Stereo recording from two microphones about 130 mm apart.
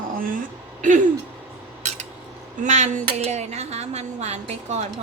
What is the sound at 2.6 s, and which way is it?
Speech, 65° right (ahead or behind).